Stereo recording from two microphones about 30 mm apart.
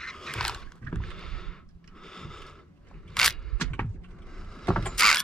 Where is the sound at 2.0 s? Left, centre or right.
Centre.